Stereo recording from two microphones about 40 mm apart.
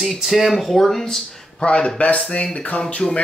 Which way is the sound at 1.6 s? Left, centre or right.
Left.